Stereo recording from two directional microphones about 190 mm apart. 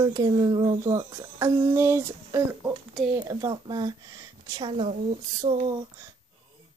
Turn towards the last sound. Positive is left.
turn(degrees=-25)  # may be behind; listen again after turning